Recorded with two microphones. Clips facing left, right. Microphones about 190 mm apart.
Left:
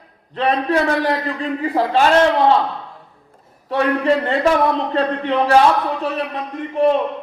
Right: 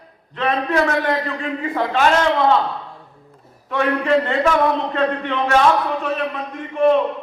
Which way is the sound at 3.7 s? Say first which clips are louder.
Left 1 dB; 35° left (ahead or behind).